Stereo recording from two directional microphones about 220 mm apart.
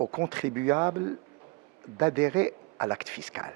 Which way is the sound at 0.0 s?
25° right (ahead or behind).